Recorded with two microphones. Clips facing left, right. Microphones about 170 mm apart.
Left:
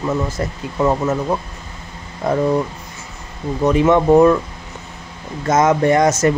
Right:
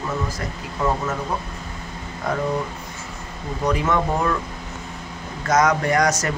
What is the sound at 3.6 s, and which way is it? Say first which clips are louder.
Speech: left 8 dB; 20° left (ahead or behind).